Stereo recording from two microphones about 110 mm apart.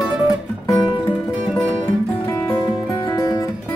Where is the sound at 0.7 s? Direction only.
40° left (ahead or behind).